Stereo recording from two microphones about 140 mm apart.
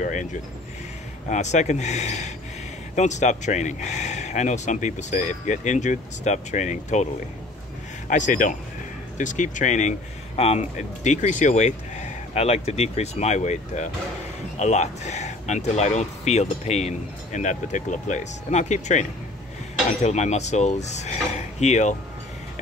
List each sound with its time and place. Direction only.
0.0 s speech: 60° left (ahead or behind)
8.1 s speech: 65° left (ahead or behind)